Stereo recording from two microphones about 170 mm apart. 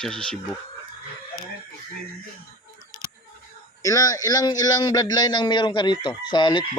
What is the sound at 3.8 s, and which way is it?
A man's voice, 20° left (ahead or behind).